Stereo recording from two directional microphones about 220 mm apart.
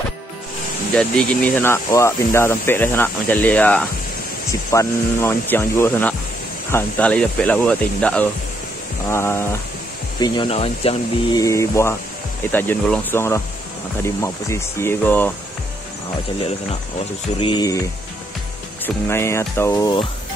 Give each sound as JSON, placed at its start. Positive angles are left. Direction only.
{"t": 0.9, "sound": "speech", "side_deg": 5}
{"t": 11.4, "sound": "speech", "side_deg": 15}
{"t": 17.4, "sound": "speech", "side_deg": 20}
{"t": 19.0, "sound": "speech", "side_deg": 10}